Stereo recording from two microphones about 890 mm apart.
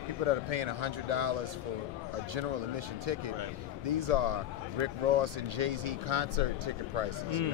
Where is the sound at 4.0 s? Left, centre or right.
Right.